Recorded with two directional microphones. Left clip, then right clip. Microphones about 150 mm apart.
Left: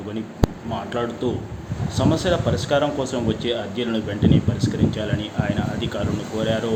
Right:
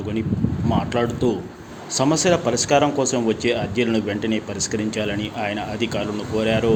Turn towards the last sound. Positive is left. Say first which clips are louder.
# right 2 dB
turn(degrees=-45)  # may be behind; listen again after turning